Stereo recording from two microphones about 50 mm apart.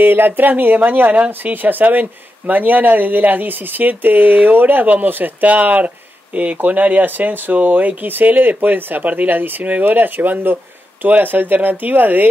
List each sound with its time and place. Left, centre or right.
0.0 s speech: right